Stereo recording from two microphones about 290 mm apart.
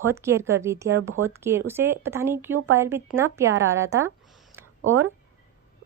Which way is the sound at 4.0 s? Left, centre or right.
Centre.